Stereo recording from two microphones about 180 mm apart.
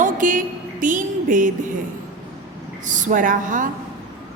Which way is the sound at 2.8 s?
45° right (ahead or behind).